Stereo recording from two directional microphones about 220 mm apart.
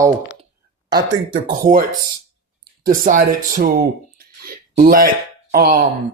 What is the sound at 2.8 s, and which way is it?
Speech, 35° right (ahead or behind).